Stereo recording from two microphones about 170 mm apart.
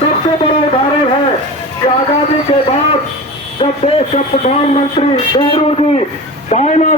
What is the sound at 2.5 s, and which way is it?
A man's voice, 30° left (ahead or behind).